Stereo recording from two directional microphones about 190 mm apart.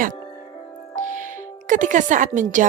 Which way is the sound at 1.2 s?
40° right (ahead or behind).